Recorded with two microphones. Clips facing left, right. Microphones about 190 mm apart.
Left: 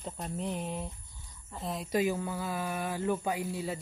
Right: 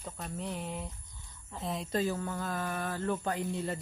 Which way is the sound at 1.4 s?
Centre (ahead or behind).